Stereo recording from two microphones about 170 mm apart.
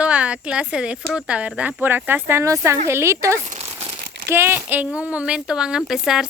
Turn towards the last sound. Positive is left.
turn(degrees=0)  # may be behind; listen again after turning